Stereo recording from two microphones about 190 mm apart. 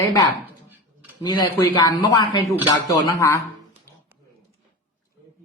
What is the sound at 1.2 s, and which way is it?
A woman's voice, 25° left (ahead or behind).